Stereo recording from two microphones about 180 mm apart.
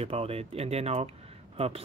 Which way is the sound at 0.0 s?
35° right (ahead or behind).